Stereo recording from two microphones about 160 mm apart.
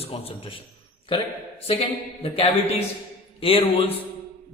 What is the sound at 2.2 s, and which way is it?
A man's voice, 35° left (ahead or behind).